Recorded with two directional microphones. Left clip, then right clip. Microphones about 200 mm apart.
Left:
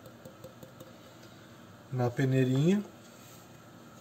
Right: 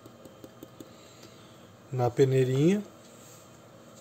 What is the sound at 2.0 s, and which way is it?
Speech, 40° right (ahead or behind).